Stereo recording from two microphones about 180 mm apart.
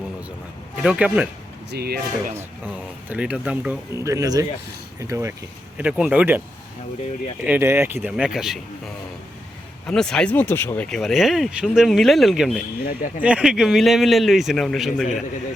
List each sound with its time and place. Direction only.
0.8 s speech: 5° right (ahead or behind)
1.7 s speech: 60° right (ahead or behind)
3.1 s speech: 5° right (ahead or behind)
7.4 s speech: 10° right (ahead or behind)
8.1 s speech: centre (ahead or behind)
9.8 s speech: 5° left (ahead or behind)
12.8 s a man's voice: 55° left (ahead or behind)
13.2 s speech: 5° right (ahead or behind)